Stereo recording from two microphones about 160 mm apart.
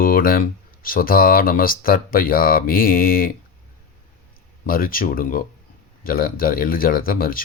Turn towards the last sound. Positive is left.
turn(degrees=65)  # may be behind; listen again after turning